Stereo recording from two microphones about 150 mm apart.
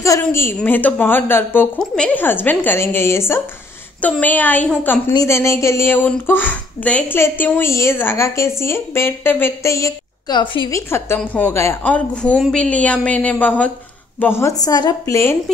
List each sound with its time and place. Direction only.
0.2 s speech: 15° left (ahead or behind); by 10.7 s 30° left (ahead or behind)
10.7 s speech: 15° left (ahead or behind)